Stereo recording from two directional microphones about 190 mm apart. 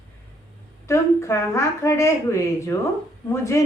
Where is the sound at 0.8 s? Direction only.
15° left (ahead or behind).